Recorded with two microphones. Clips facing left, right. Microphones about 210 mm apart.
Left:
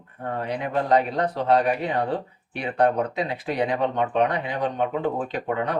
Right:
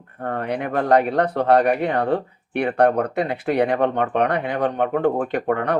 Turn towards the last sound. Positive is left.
turn(degrees=-60)  # may be behind; listen again after turning